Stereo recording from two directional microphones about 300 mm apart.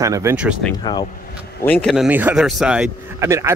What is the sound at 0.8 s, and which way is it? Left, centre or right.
Speech, centre.